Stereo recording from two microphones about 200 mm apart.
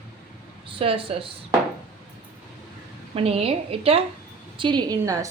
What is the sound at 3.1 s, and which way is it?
A woman's voice, 30° right (ahead or behind).